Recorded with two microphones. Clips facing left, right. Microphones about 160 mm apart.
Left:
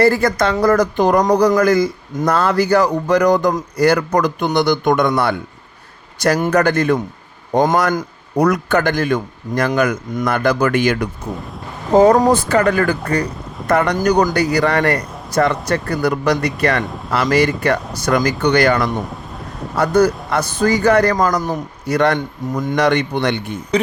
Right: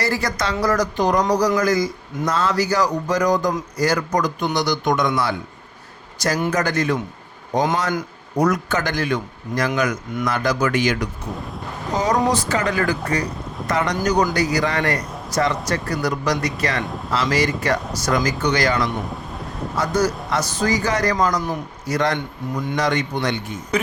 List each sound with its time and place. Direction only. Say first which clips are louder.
0.0 s speech: left 9 dB; 55° left (ahead or behind)
19.1 s wind: even; centre (ahead or behind)
19.7 s speech: left 7 dB; 60° left (ahead or behind)
22.8 s speech: left 6 dB; 65° left (ahead or behind)